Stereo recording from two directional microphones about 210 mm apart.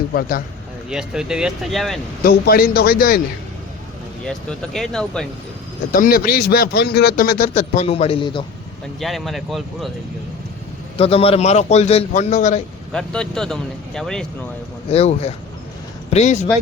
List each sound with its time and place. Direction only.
0.1 s speech: 45° left (ahead or behind)
0.9 s speech: 5° right (ahead or behind)
2.2 s speech: 45° left (ahead or behind)
4.2 s speech: 5° left (ahead or behind)
5.9 s speech: 40° left (ahead or behind); by 8.4 s 25° left (ahead or behind)
9.0 s speech: centre (ahead or behind)
10.9 s speech: 30° left (ahead or behind)
12.9 s speech: 5° left (ahead or behind)
14.8 s speech: 30° left (ahead or behind)